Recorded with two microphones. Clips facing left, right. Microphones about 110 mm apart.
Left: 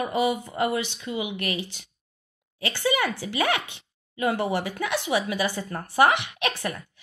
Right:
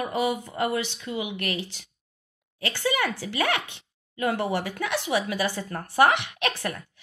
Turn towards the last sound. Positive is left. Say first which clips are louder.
# even
turn(degrees=10)  # may be behind; listen again after turning